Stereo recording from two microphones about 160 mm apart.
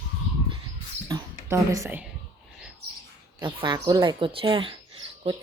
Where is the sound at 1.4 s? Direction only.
20° right (ahead or behind).